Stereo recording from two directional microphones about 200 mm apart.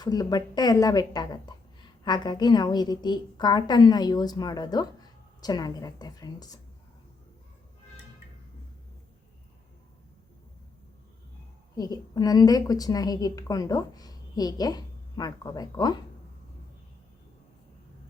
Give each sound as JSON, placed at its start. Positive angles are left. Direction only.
{"t": 0.0, "sound": "speech", "side_deg": 20}
{"t": 11.8, "sound": "speech", "side_deg": 20}